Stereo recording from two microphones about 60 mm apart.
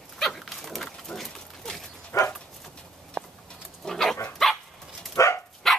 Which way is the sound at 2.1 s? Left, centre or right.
Left.